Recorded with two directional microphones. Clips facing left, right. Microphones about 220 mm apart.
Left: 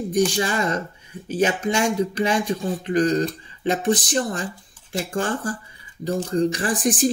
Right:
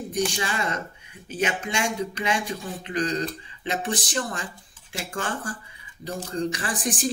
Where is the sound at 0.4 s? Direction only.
40° left (ahead or behind).